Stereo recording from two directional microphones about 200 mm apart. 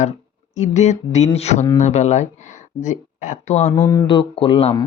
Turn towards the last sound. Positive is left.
turn(degrees=30)  # may be behind; listen again after turning